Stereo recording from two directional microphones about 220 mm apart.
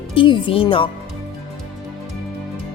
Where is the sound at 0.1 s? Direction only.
25° left (ahead or behind).